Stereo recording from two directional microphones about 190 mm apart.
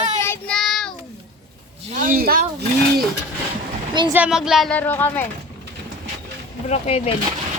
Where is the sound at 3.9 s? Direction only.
25° right (ahead or behind).